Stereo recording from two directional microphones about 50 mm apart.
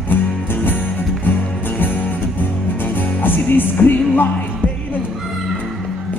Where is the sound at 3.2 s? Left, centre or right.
Left.